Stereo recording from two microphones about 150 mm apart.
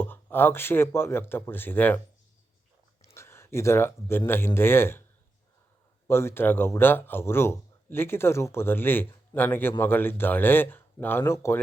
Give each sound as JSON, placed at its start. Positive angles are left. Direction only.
{"t": 0.0, "sound": "speech", "side_deg": 15}
{"t": 3.2, "sound": "speech", "side_deg": 15}
{"t": 6.1, "sound": "speech", "side_deg": 15}